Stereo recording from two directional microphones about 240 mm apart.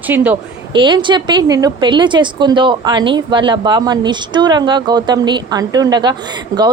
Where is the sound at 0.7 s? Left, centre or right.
Centre.